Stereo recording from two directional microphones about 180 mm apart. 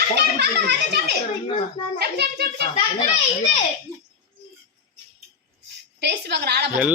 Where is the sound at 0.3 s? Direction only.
70° right (ahead or behind).